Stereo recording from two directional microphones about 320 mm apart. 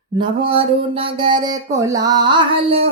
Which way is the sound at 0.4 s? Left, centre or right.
Centre.